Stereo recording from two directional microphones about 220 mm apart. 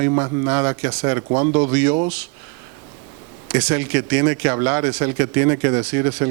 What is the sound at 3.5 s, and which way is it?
Speech, 15° right (ahead or behind).